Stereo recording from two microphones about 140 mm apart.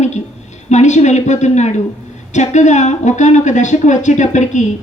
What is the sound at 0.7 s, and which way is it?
A man's voice, 55° left (ahead or behind).